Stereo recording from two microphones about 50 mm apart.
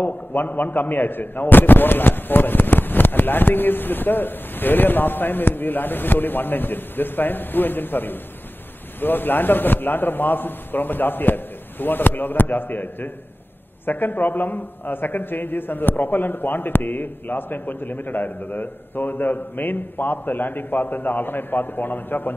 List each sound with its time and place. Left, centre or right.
0.0 s a man's voice: left